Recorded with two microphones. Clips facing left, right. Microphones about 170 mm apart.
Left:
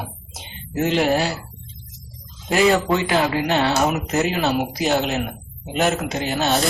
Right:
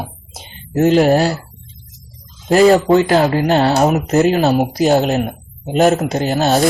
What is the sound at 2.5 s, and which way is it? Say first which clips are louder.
Speech: right 8 dB; 40° right (ahead or behind).